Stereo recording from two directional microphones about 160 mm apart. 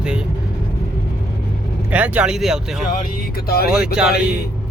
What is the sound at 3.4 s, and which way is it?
Speech, 70° left (ahead or behind).